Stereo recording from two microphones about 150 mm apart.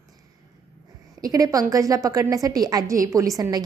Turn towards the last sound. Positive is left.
turn(degrees=-25)  # may be behind; listen again after turning